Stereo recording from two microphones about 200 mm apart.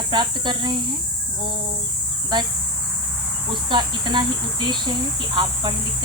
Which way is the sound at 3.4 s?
25° right (ahead or behind).